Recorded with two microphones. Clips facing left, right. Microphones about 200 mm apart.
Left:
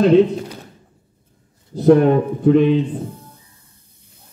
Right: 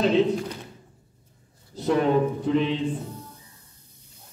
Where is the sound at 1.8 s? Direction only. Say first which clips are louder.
Left 9 dB; 55° left (ahead or behind).